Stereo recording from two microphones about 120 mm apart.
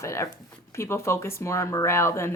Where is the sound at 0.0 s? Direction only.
25° left (ahead or behind).